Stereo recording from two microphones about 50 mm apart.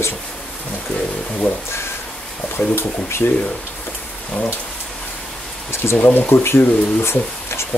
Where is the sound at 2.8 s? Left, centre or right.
Left.